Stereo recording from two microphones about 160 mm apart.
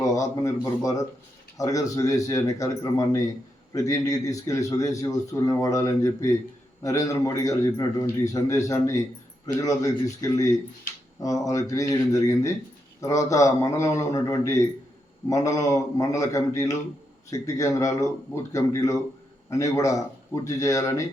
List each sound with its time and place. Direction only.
0.0 s a man's voice: 20° left (ahead or behind)